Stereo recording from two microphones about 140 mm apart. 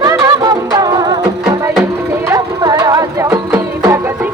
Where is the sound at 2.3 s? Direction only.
25° right (ahead or behind).